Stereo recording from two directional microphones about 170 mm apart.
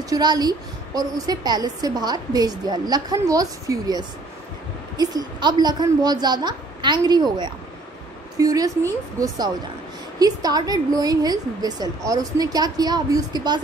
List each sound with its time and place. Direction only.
0.1 s a woman's voice: 25° right (ahead or behind)